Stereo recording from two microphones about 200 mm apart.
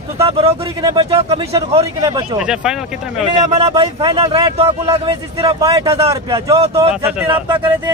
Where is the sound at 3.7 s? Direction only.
20° right (ahead or behind).